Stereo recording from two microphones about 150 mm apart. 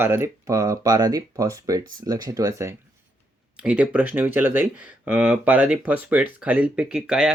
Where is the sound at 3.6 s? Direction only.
10° right (ahead or behind).